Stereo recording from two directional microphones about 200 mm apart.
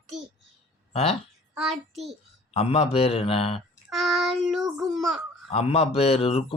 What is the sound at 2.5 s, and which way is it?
A man's voice, 30° left (ahead or behind).